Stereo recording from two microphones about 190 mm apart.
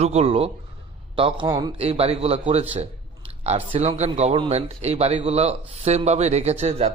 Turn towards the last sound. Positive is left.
turn(degrees=-35)  # may be behind; listen again after turning